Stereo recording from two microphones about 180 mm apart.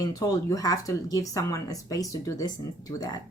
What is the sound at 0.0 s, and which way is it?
Speech, 20° left (ahead or behind).